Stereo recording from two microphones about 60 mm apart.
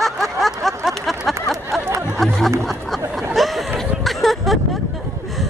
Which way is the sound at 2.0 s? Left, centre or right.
Centre.